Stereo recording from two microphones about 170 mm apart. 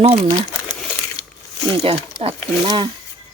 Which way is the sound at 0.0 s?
35° right (ahead or behind).